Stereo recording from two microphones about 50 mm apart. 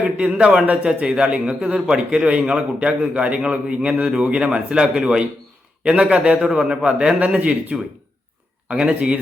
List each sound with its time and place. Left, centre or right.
0.3 s a man's voice: centre